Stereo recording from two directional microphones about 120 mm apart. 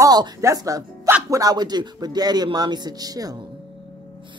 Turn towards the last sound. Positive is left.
turn(degrees=-30)  # may be behind; listen again after turning